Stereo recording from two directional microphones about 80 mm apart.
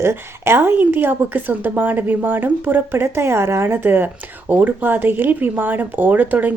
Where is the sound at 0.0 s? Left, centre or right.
Right.